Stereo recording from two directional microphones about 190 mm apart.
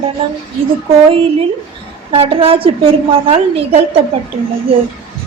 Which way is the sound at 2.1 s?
30° right (ahead or behind).